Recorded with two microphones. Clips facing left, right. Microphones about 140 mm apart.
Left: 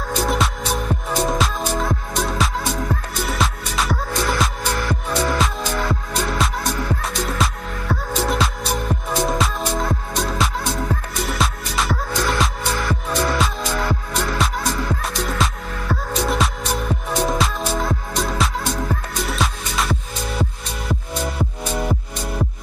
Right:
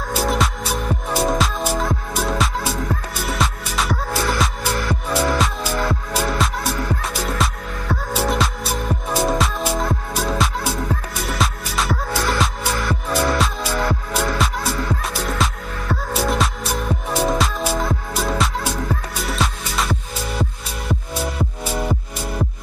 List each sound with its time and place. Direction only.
0.1 s music: 5° right (ahead or behind)